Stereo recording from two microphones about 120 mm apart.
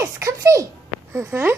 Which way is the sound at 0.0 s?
25° right (ahead or behind).